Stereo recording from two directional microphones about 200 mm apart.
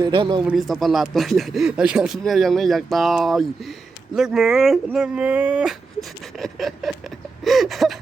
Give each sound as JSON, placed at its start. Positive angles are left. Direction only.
{"t": 0.0, "sound": "speech", "side_deg": -25}
{"t": 0.4, "sound": "speech", "side_deg": 0}